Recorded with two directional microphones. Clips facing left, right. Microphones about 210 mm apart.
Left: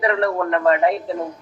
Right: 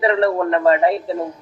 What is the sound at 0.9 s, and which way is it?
Speech, centre (ahead or behind).